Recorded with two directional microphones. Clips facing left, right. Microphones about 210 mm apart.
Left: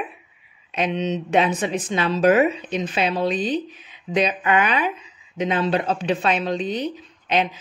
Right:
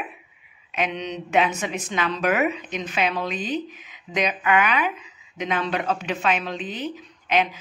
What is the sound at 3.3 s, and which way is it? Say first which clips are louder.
Speech: left 4 dB; 10° right (ahead or behind).